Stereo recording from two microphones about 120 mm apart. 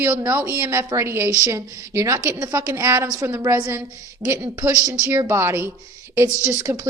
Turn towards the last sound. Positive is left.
turn(degrees=-20)  # may be behind; listen again after turning